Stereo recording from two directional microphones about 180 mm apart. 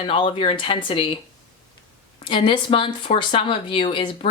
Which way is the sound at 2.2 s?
25° left (ahead or behind).